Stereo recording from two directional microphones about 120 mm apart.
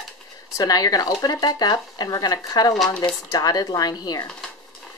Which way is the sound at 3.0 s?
35° left (ahead or behind).